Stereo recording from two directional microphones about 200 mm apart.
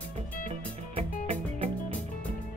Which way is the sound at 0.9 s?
30° right (ahead or behind).